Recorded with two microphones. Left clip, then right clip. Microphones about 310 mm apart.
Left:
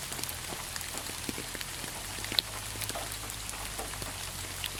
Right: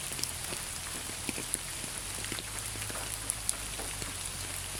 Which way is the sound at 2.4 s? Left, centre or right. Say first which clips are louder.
Left 11 dB; left.